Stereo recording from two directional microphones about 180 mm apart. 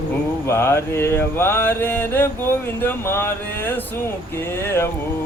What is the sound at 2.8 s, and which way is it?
Speech, 15° left (ahead or behind).